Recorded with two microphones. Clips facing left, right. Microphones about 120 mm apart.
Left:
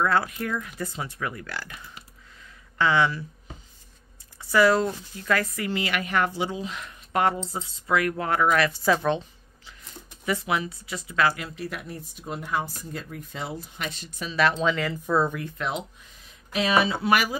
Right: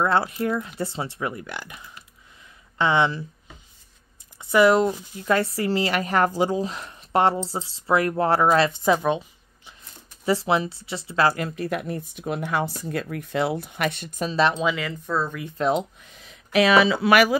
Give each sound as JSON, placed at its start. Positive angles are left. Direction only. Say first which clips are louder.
{"t": 0.0, "sound": "speech", "louder": "right 2 dB", "side_deg": -25}
{"t": 2.8, "sound": "speech", "louder": "right 1 dB", "side_deg": -25}
{"t": 4.4, "sound": "speech", "louder": "right 3 dB", "side_deg": -20}
{"t": 10.2, "sound": "speech", "louder": "right 5 dB", "side_deg": -30}
{"t": 14.3, "sound": "speech", "louder": "right 2 dB", "side_deg": -25}
{"t": 14.6, "sound": "speech", "louder": "even", "side_deg": -5}
{"t": 15.0, "sound": "speech", "louder": "left 3 dB", "side_deg": 15}
{"t": 15.5, "sound": "speech", "louder": "right 8 dB", "side_deg": -35}
{"t": 16.3, "sound": "speech", "louder": "right 7 dB", "side_deg": -80}